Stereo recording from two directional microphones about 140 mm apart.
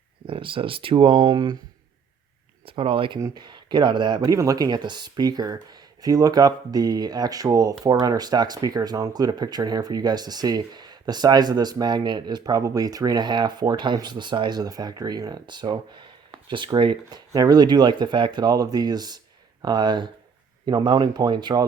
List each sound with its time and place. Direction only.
0.3 s speech: 40° right (ahead or behind)
2.6 s speech: 40° right (ahead or behind)
3.2 s speech: 25° right (ahead or behind)